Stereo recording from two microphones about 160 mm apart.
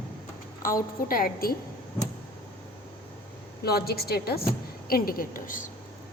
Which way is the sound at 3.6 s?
75° left (ahead or behind).